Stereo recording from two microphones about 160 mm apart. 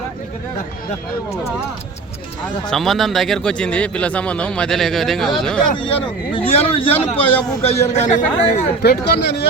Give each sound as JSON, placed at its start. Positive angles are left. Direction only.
{"t": 2.6, "sound": "speech", "side_deg": 0}
{"t": 5.7, "sound": "speech", "side_deg": 35}
{"t": 7.3, "sound": "a man's voice", "side_deg": 10}
{"t": 7.6, "sound": "speech", "side_deg": 40}
{"t": 8.8, "sound": "speech", "side_deg": 90}